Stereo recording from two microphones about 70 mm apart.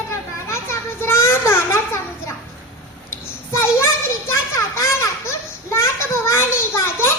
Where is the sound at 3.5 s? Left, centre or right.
Left.